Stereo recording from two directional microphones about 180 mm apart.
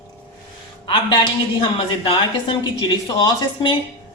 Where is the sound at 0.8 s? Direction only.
25° left (ahead or behind).